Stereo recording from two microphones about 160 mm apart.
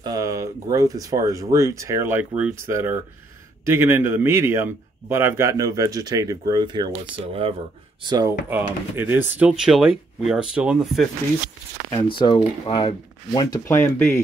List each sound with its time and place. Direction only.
0.0 s a man's voice: 20° right (ahead or behind)
8.0 s speech: 25° right (ahead or behind)
8.5 s speech: 10° right (ahead or behind)
12.1 s speech: 30° left (ahead or behind); by 14.2 s 15° left (ahead or behind)